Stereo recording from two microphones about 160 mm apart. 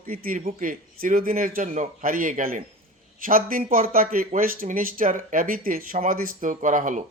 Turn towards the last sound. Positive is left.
turn(degrees=-50)  # may be behind; listen again after turning